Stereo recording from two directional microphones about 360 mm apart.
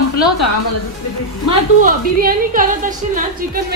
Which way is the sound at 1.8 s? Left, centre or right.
Right.